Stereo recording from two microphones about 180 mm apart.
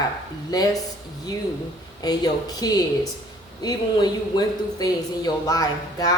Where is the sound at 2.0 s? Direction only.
20° left (ahead or behind).